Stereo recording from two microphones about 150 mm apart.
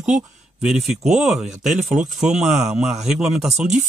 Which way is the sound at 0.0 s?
5° right (ahead or behind).